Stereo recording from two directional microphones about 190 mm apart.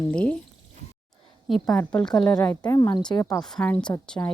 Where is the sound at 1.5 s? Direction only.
5° left (ahead or behind).